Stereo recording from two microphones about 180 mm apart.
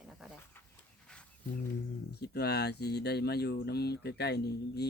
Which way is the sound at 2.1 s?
65° left (ahead or behind).